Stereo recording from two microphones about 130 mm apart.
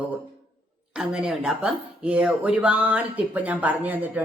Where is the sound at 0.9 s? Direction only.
5° right (ahead or behind).